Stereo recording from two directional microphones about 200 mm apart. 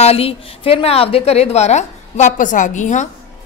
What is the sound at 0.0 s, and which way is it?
A woman's voice, 30° left (ahead or behind).